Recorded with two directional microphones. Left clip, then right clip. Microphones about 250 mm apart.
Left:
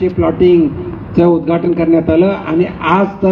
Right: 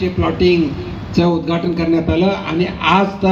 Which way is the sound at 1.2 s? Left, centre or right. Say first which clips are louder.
Left 5 dB; right.